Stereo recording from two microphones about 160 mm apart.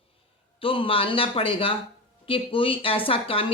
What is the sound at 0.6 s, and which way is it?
A man's voice, 35° left (ahead or behind).